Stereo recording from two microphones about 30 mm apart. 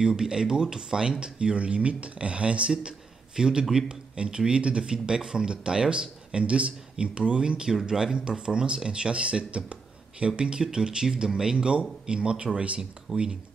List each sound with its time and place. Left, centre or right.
0.0 s a man's voice: right
4.5 s speech: right
11.5 s speech: right